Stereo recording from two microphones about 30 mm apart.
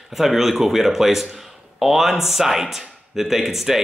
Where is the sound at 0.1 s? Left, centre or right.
Centre.